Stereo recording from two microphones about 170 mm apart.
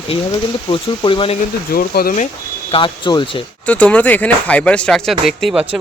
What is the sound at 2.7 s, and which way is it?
Speech, 30° left (ahead or behind).